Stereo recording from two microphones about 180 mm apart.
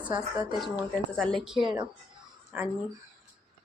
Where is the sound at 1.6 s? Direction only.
25° right (ahead or behind).